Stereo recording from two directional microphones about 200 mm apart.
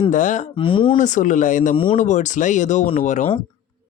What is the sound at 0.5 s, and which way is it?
Speech, 25° left (ahead or behind).